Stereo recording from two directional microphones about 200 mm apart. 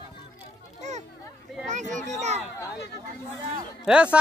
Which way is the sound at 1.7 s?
35° right (ahead or behind).